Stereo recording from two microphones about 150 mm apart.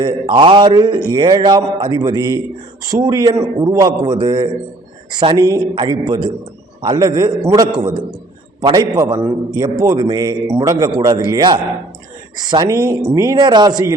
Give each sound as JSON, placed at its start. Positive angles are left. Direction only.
{"t": 0.0, "sound": "a man's voice", "side_deg": -30}
{"t": 9.0, "sound": "a man's voice", "side_deg": -20}